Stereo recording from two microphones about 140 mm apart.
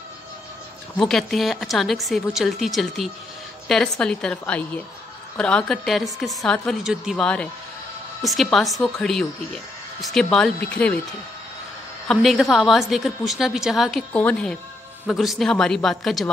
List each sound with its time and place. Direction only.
0.9 s a woman's voice: centre (ahead or behind)
12.1 s a woman's voice: centre (ahead or behind)